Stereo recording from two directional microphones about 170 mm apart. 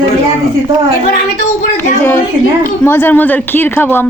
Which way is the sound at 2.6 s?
10° left (ahead or behind).